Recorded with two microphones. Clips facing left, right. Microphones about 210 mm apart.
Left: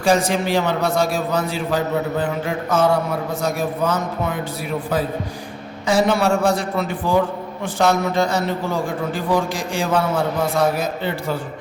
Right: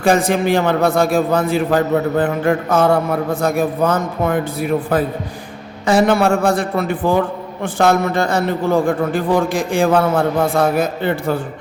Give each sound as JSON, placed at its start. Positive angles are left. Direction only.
{"t": 0.0, "sound": "a man's voice", "side_deg": -55}
{"t": 5.8, "sound": "a man's voice", "side_deg": -55}